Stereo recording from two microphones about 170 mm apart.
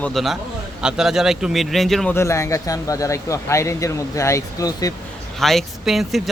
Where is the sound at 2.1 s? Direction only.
15° left (ahead or behind).